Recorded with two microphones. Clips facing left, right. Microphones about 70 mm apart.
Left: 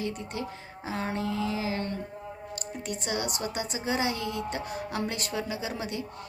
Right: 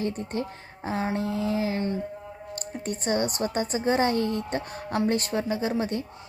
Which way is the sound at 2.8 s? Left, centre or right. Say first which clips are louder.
Right 6 dB; right.